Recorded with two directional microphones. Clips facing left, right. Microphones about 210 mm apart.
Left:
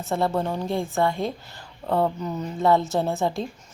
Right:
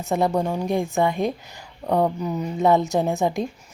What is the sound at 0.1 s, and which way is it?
A woman's voice, 15° right (ahead or behind).